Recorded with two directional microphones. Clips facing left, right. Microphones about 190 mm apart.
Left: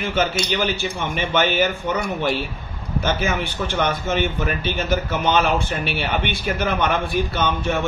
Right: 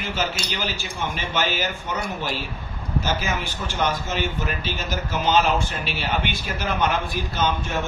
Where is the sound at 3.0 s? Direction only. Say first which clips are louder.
Left 6 dB; 60° left (ahead or behind).